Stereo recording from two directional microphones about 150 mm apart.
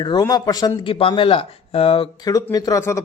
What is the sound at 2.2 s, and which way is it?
Speech, 25° left (ahead or behind).